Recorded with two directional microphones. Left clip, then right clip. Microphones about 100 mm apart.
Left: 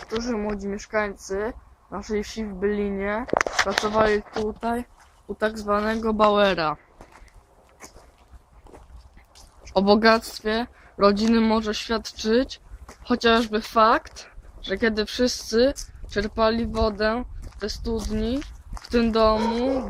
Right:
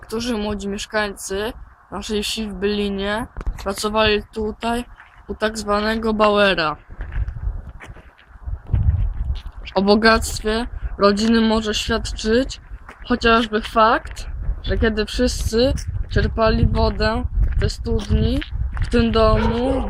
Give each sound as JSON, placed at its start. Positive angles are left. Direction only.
{"t": 0.1, "sound": "speech", "side_deg": -15}
{"t": 5.4, "sound": "speech", "side_deg": 25}
{"t": 9.7, "sound": "a woman's voice", "side_deg": 40}